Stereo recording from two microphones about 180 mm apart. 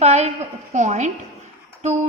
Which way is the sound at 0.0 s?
40° right (ahead or behind).